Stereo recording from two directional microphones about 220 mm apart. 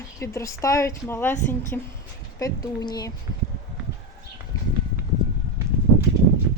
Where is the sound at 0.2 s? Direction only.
15° left (ahead or behind).